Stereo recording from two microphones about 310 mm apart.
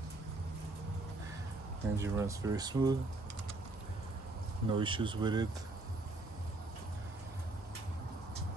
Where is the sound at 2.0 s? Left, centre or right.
Centre.